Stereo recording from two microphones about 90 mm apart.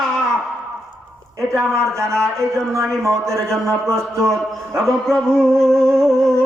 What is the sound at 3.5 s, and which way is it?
A man's voice, 5° left (ahead or behind).